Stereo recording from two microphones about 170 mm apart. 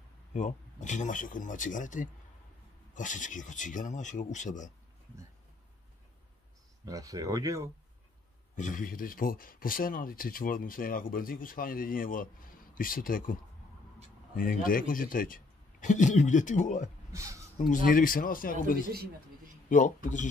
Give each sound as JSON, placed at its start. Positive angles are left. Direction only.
{"t": 0.3, "sound": "a man's voice", "side_deg": 45}
{"t": 6.9, "sound": "speech", "side_deg": -20}
{"t": 8.5, "sound": "a man's voice", "side_deg": 50}
{"t": 17.1, "sound": "speech", "side_deg": -20}
{"t": 17.6, "sound": "a man's voice", "side_deg": 50}